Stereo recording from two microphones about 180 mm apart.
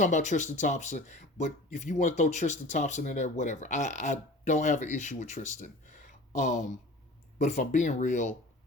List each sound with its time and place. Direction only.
0.0 s speech: 40° left (ahead or behind)